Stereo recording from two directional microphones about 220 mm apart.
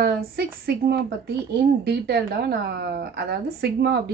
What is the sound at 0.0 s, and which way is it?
Speech, 45° right (ahead or behind).